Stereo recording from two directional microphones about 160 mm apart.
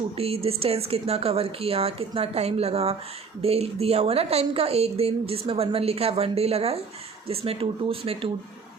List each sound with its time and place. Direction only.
0.2 s speech: 40° right (ahead or behind)